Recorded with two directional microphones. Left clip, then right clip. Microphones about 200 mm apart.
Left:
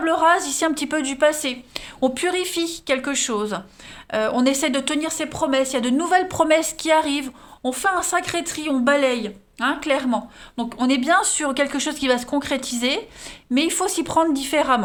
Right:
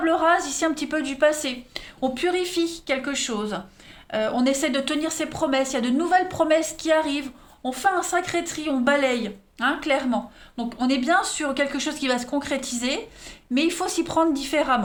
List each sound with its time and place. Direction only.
0.0 s speech: 35° left (ahead or behind)